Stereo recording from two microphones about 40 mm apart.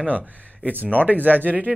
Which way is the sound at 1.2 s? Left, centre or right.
Right.